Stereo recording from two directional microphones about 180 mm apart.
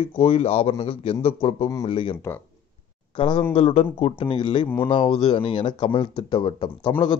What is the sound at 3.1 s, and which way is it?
Speech, 25° left (ahead or behind).